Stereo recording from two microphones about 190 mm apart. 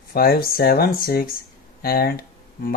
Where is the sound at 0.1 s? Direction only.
50° left (ahead or behind).